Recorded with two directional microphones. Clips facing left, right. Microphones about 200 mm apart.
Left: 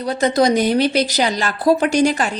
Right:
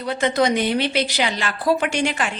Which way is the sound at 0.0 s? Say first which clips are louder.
Left 4 dB; 40° left (ahead or behind).